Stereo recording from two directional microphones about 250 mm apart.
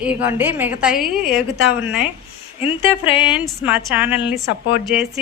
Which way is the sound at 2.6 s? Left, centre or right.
Left.